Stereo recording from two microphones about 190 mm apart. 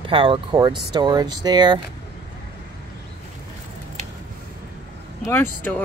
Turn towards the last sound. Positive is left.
turn(degrees=10)  # may be behind; listen again after turning